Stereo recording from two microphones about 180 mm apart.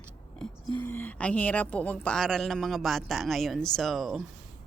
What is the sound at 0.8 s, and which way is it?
A woman's voice, 10° left (ahead or behind).